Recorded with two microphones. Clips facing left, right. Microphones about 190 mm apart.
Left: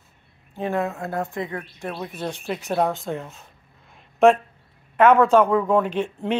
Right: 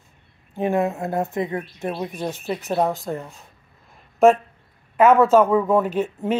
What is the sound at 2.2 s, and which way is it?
Speech, 5° right (ahead or behind).